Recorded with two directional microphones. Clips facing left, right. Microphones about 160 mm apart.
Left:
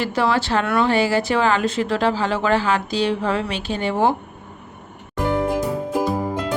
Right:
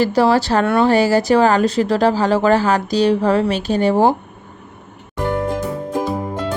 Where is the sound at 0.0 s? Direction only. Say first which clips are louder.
Right 6 dB; 35° right (ahead or behind).